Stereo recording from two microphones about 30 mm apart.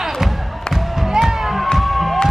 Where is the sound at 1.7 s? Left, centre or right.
Centre.